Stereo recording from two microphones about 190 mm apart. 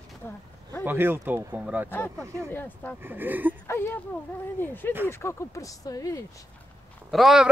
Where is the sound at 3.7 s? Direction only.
15° left (ahead or behind).